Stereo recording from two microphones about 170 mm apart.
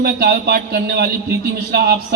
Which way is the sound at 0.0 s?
65° right (ahead or behind).